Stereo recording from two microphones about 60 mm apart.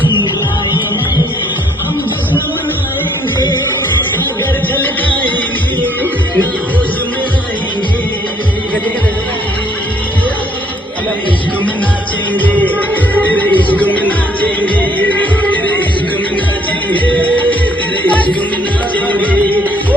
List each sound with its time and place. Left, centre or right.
4.7 s a sound: left
12.4 s music: left
16.9 s music: left